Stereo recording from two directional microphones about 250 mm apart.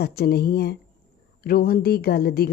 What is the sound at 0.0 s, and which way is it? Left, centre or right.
A woman's voice, left.